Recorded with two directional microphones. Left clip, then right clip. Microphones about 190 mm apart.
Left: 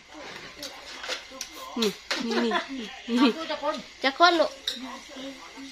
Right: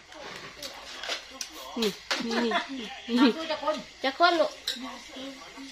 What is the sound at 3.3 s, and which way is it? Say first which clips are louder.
Speech: even; centre (ahead or behind).